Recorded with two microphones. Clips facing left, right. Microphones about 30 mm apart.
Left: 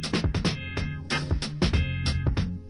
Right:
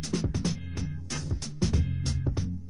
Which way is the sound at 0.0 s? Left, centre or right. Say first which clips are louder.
Left 3 dB; left.